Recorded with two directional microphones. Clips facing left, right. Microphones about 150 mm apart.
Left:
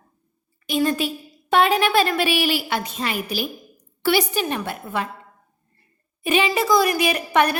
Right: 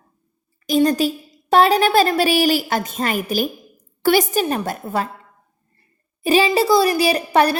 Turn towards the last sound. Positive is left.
turn(degrees=-35)  # may be behind; listen again after turning